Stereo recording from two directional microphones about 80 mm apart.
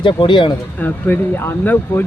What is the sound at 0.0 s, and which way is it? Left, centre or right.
Speech, left.